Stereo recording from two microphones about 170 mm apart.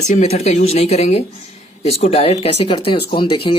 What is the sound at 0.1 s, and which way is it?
Speech, 40° left (ahead or behind).